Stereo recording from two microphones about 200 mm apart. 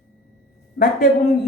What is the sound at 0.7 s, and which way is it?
Speech, 45° left (ahead or behind).